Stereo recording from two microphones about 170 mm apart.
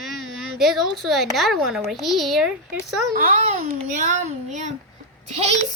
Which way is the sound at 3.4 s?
40° right (ahead or behind).